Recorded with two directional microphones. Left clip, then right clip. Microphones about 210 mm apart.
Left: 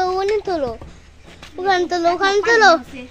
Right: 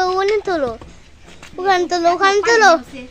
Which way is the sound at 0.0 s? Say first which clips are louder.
Right 2 dB; 15° right (ahead or behind).